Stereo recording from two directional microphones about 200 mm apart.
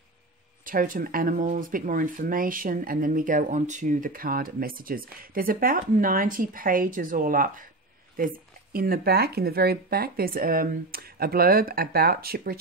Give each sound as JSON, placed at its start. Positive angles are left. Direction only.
{"t": 0.7, "sound": "speech", "side_deg": -45}
{"t": 8.7, "sound": "speech", "side_deg": -50}